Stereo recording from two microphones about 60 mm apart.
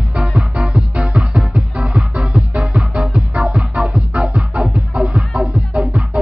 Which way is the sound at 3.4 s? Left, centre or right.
Centre.